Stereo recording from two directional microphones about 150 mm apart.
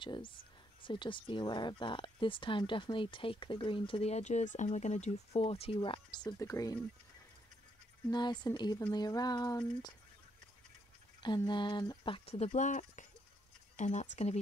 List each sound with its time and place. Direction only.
0.0 s speech: 35° left (ahead or behind)
8.1 s a sound: 30° left (ahead or behind)
11.2 s speech: 30° left (ahead or behind); by 14.4 s 50° left (ahead or behind)